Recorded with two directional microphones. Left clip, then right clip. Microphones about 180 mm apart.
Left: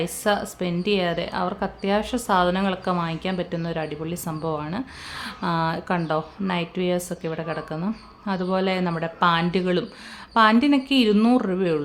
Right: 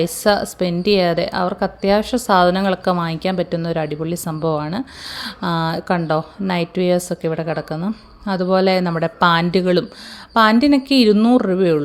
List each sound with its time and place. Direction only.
0.0 s a woman's voice: 30° right (ahead or behind)